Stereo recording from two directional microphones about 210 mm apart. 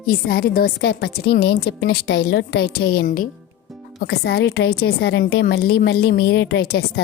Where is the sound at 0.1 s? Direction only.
45° left (ahead or behind).